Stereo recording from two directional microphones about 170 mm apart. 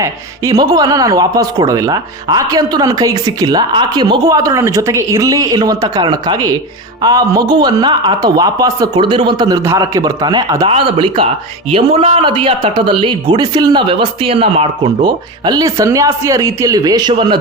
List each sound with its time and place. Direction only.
0.0 s a man's voice: 20° right (ahead or behind)